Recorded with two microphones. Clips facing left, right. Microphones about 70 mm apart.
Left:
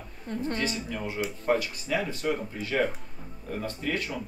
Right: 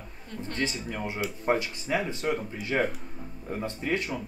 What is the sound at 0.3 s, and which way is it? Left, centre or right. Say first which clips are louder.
Speech: left 6 dB; left.